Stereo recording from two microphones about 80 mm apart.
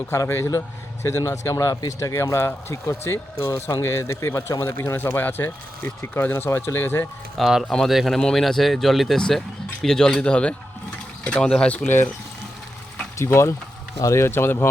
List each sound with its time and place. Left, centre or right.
0.3 s speech: left
7.3 s speech: centre
13.1 s speech: left